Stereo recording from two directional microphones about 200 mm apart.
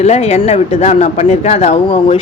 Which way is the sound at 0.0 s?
30° left (ahead or behind).